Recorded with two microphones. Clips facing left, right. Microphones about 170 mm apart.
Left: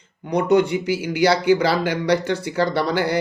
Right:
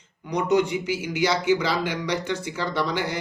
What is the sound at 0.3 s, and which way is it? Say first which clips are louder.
Speech: left 4 dB; 60° left (ahead or behind).